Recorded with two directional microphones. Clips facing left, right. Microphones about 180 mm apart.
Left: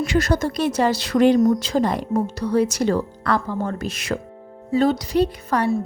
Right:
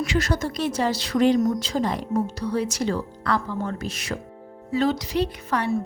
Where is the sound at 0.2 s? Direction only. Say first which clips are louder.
Left 6 dB; 40° left (ahead or behind).